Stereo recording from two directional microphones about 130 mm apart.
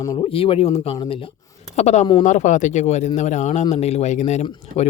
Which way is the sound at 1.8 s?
65° left (ahead or behind).